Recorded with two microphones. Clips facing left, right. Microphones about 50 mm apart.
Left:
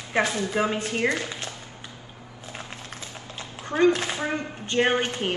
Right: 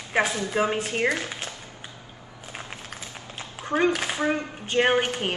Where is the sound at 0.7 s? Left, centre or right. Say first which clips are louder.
Even; right.